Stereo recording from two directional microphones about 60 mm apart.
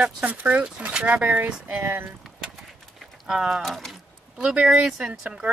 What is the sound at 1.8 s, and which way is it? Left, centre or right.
Speech, right.